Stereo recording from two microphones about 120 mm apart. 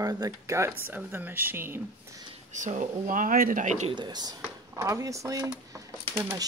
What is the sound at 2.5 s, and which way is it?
Speech, 90° right.